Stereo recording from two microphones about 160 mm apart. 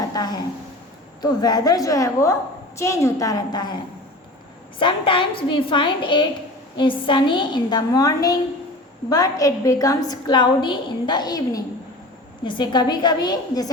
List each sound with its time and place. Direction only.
0.1 s a sound: 25° left (ahead or behind)
1.2 s a woman's voice: 25° left (ahead or behind)
4.8 s a woman's voice: 30° left (ahead or behind)